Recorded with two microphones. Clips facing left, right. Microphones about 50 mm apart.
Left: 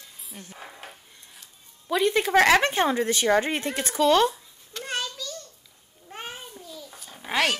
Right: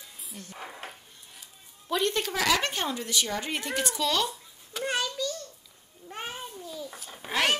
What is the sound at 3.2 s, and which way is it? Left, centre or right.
Speech, left.